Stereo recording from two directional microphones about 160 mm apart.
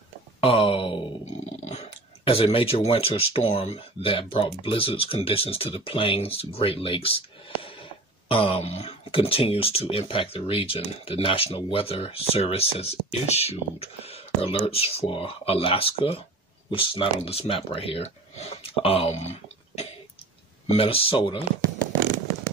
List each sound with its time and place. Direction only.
0.4 s speech: 35° left (ahead or behind)
1.2 s speech: 45° left (ahead or behind)
20.6 s speech: 35° left (ahead or behind)